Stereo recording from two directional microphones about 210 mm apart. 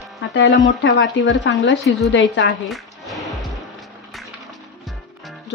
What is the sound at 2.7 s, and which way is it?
Music, centre (ahead or behind).